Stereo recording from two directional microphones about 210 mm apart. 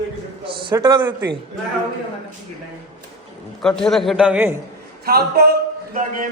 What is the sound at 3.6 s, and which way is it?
Speech, 5° left (ahead or behind).